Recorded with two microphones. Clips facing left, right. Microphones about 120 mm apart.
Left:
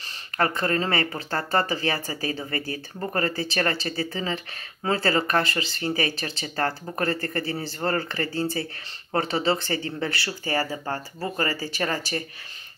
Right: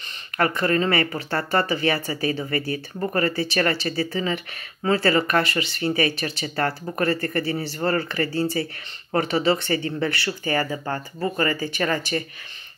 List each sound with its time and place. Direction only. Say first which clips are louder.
0.4 s speech: right 3 dB; 30° left (ahead or behind)